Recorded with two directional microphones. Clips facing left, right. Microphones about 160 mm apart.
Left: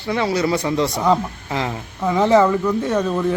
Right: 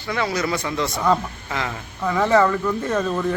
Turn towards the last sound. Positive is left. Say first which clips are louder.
# left 3 dB
turn(degrees=10)  # may be behind; listen again after turning